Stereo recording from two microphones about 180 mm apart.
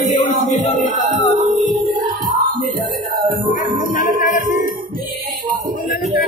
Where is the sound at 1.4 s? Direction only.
20° right (ahead or behind).